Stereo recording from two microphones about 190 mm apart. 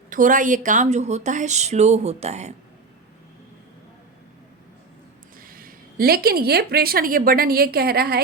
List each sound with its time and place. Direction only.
0.1 s speech: 45° right (ahead or behind)
5.4 s a woman's voice: 50° right (ahead or behind)